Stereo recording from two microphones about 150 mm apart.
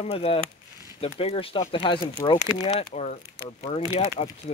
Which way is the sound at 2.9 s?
50° left (ahead or behind).